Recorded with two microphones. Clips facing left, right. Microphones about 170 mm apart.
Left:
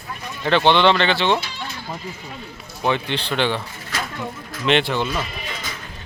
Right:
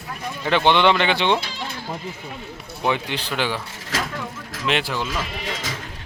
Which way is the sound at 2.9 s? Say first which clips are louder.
Left 2 dB; 10° right (ahead or behind).